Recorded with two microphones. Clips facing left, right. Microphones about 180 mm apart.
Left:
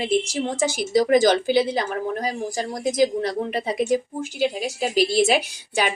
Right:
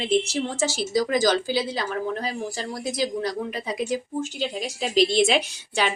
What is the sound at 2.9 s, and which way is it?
Speech, 20° left (ahead or behind).